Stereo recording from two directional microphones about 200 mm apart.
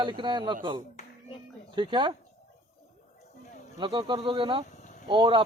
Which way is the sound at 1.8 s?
25° right (ahead or behind).